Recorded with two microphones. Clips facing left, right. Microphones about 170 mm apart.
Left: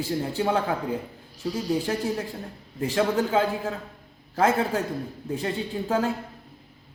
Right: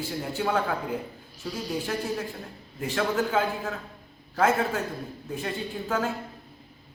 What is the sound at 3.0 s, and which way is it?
A man's voice, 30° left (ahead or behind).